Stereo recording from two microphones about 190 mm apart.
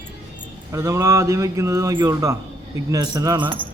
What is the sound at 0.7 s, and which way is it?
A man's voice, 15° right (ahead or behind).